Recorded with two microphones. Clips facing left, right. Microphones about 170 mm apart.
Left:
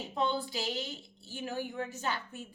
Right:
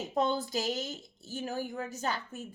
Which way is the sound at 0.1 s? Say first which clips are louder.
Right 3 dB; 40° right (ahead or behind).